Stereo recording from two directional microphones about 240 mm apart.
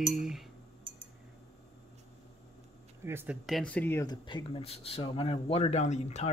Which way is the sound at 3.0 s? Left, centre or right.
Centre.